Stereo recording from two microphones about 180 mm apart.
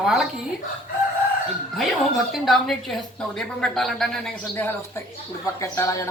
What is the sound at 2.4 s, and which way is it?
Speech, centre (ahead or behind).